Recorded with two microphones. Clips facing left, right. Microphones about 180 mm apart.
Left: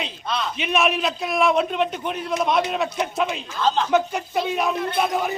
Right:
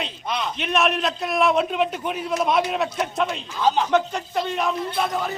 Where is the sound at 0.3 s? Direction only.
15° right (ahead or behind).